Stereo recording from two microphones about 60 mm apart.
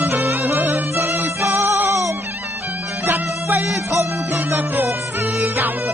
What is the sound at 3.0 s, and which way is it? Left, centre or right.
Music, right.